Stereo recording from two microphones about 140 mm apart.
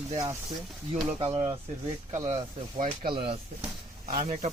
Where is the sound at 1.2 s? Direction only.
40° right (ahead or behind).